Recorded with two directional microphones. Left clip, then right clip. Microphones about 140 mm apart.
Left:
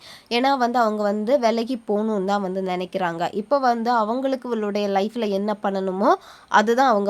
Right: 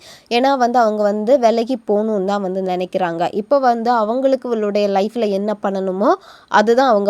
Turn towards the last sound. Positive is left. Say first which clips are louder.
# right 4 dB
turn(degrees=-30)  # may be behind; listen again after turning